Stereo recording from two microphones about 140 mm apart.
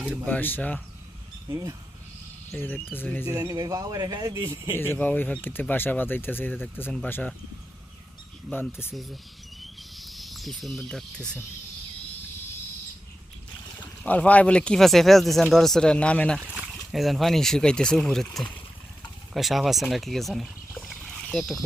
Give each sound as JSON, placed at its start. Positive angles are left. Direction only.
{"t": 0.3, "sound": "speech", "side_deg": 15}
{"t": 1.5, "sound": "speech", "side_deg": -25}
{"t": 2.6, "sound": "speech", "side_deg": 15}
{"t": 3.2, "sound": "speech", "side_deg": -25}
{"t": 4.8, "sound": "speech", "side_deg": 15}
{"t": 8.4, "sound": "speech", "side_deg": 5}
{"t": 9.6, "sound": "cricket", "side_deg": 0}
{"t": 13.7, "sound": "speech", "side_deg": 10}
{"t": 19.3, "sound": "speech", "side_deg": 0}
{"t": 20.8, "sound": "wild animals", "side_deg": 5}